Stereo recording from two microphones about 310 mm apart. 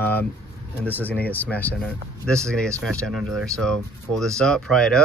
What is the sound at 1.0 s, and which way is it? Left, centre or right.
Speech, centre.